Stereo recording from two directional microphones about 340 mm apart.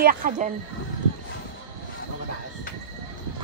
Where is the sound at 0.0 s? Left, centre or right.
Right.